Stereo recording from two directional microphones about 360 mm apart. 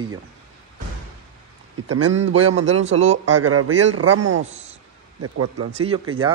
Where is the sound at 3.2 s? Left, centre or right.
Right.